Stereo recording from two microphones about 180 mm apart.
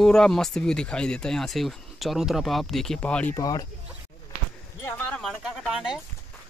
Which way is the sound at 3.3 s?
20° left (ahead or behind).